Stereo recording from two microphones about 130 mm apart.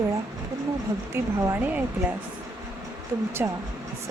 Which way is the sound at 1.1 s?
25° right (ahead or behind).